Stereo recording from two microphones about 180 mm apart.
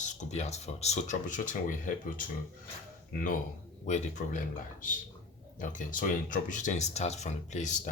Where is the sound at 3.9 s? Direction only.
45° left (ahead or behind).